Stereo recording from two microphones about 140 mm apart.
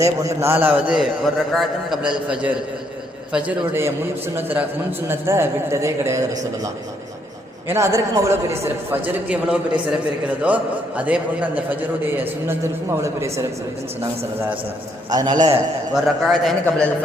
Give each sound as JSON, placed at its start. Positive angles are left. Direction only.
{"t": 0.0, "sound": "a man's voice", "side_deg": -20}
{"t": 7.7, "sound": "a man's voice", "side_deg": -20}
{"t": 15.1, "sound": "a man's voice", "side_deg": -30}
{"t": 16.2, "sound": "a man's voice", "side_deg": 0}